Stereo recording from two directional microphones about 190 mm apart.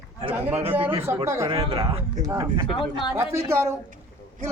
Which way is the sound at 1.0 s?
15° right (ahead or behind).